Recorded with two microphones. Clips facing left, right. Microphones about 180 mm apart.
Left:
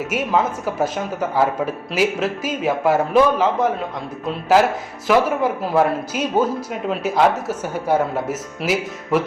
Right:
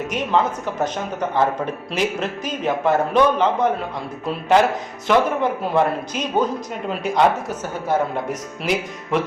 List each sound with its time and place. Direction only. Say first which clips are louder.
0.1 s speech: even; 5° left (ahead or behind)